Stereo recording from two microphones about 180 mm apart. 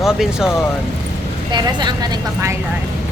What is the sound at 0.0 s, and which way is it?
Speech, 5° right (ahead or behind).